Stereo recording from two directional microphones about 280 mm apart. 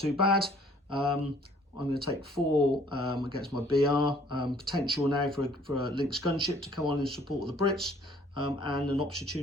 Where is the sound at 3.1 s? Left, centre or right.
Centre.